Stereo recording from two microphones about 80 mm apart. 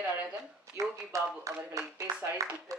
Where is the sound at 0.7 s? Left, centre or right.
Right.